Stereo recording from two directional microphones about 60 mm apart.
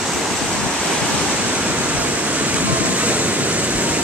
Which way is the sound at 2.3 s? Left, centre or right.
Right.